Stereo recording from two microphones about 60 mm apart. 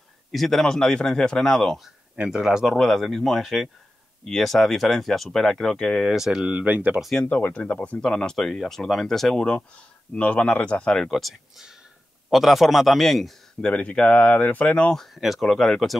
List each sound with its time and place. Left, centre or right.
0.3 s a man's voice: centre
2.1 s speech: centre
2.6 s speech: centre
6.0 s speech: centre
6.4 s speech: right
7.2 s speech: left
8.0 s a man's voice: centre
11.0 s speech: centre
13.6 s speech: centre
15.1 s speech: centre